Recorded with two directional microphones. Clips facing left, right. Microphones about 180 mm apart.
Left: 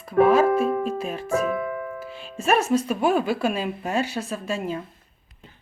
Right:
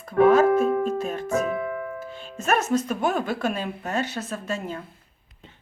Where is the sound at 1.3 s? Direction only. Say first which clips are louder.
Left 2 dB; 20° right (ahead or behind).